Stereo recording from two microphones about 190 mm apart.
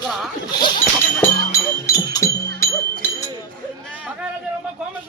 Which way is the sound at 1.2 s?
15° left (ahead or behind).